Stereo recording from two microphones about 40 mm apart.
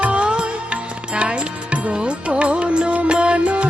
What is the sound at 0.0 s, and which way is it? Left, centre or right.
Music, right.